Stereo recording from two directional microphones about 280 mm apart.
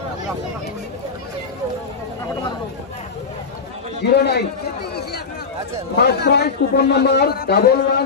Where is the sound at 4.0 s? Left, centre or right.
Left.